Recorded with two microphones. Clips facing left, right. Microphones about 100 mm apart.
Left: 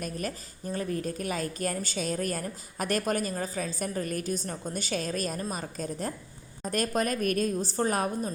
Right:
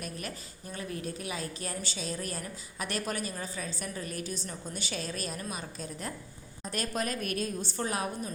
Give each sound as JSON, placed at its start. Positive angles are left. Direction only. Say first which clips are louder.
{"t": 0.0, "sound": "a woman's voice", "louder": "left 5 dB", "side_deg": 40}